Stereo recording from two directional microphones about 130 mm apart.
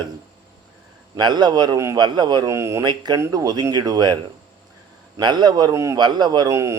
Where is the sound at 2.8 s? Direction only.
35° right (ahead or behind).